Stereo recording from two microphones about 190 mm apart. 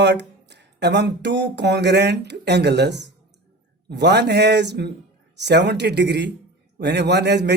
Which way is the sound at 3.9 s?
60° right (ahead or behind).